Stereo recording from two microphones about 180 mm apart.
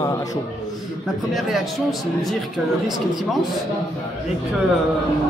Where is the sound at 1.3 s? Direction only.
Centre (ahead or behind).